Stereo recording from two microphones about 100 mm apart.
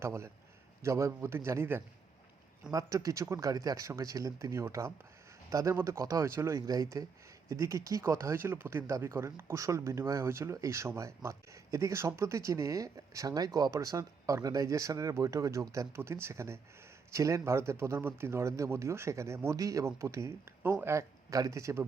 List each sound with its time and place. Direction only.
0.0 s speech: 25° right (ahead or behind)